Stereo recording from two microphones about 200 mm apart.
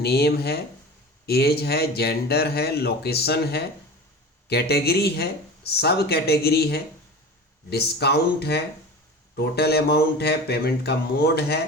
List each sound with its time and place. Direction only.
0.0 s speech: 55° left (ahead or behind)